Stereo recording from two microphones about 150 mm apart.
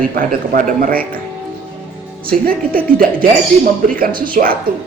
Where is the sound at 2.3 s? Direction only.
80° right.